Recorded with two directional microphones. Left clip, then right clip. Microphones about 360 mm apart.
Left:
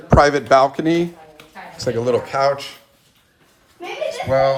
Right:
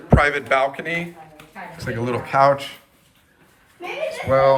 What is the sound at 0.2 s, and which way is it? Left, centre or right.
Speech, centre.